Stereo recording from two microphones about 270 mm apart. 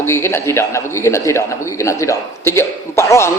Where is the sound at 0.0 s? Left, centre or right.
Centre.